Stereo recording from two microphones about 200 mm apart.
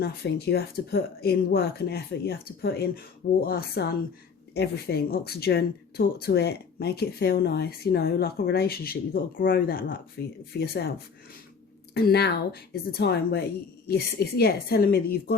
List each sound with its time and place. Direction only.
0.0 s speech: 50° left (ahead or behind)